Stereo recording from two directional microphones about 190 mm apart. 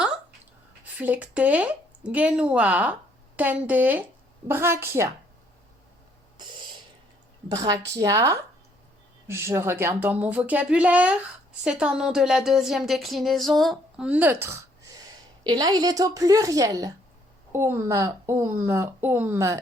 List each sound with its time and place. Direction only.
0.9 s speech: 10° right (ahead or behind)
7.4 s a woman's voice: 20° right (ahead or behind)
15.4 s a woman's voice: 20° right (ahead or behind)